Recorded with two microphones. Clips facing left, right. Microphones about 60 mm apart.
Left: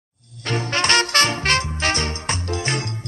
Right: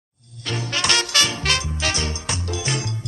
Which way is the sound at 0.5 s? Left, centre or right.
Left.